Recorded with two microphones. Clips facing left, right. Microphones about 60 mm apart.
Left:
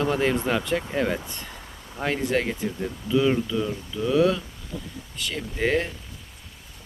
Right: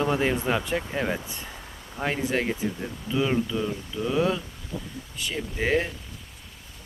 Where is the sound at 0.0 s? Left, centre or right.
Centre.